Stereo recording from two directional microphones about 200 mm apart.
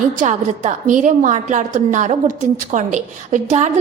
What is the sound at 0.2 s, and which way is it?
A woman's voice, 40° right (ahead or behind).